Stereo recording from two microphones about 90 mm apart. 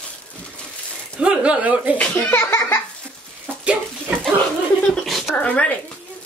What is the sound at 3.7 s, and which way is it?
Speech, 20° right (ahead or behind).